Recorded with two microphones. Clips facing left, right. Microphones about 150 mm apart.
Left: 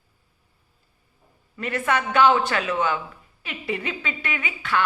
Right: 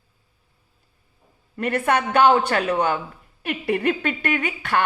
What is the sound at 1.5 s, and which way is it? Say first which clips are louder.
A woman's voice: right 3 dB; 55° right (ahead or behind).